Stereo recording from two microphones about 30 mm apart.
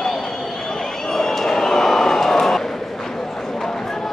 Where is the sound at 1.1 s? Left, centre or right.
Centre.